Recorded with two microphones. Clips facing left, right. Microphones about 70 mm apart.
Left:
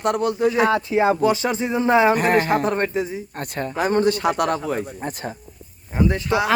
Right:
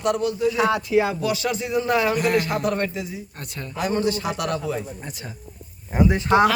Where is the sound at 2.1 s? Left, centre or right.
Left.